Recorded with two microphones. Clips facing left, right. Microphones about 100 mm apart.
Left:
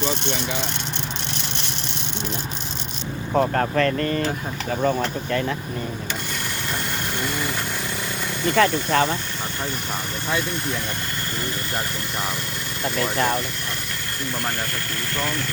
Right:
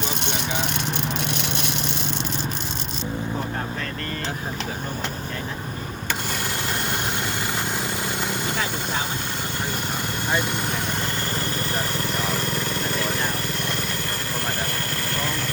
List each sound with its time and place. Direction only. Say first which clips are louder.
3.3 s speech: left 9 dB; 90° left
8.5 s speech: left 9 dB; 75° left (ahead or behind)